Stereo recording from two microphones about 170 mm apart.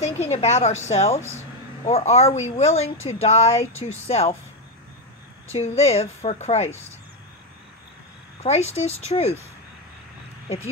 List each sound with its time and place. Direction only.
0.3 s speech: 40° left (ahead or behind)
5.5 s speech: 40° left (ahead or behind)
8.4 s speech: 40° left (ahead or behind)